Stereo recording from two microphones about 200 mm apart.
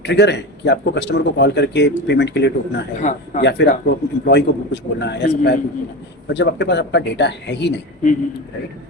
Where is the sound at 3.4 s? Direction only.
60° left (ahead or behind).